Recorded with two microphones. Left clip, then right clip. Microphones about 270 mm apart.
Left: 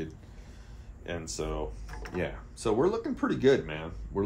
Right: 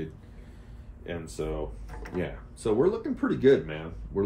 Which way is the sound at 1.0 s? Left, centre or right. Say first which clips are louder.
Right 1 dB; left.